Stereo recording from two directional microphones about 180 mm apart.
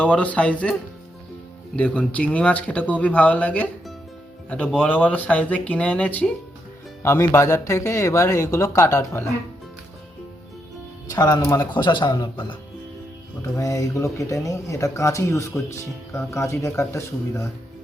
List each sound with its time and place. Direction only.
0.0 s speech: 5° left (ahead or behind)
11.1 s a man's voice: 20° left (ahead or behind)
13.4 s speech: 15° left (ahead or behind)